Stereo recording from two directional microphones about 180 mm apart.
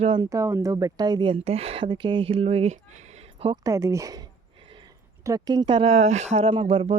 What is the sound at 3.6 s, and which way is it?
Speech, 20° right (ahead or behind).